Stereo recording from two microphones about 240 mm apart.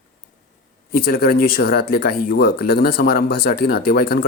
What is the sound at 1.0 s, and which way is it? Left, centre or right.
Speech, left.